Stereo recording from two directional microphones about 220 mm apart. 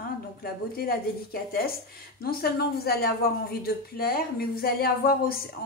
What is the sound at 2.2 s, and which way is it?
Speech, 45° left (ahead or behind).